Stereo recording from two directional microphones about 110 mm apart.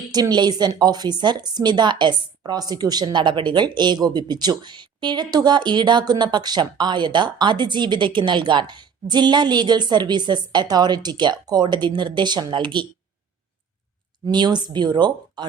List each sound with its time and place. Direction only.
0.1 s a woman's voice: 40° right (ahead or behind)
14.3 s a woman's voice: 40° right (ahead or behind)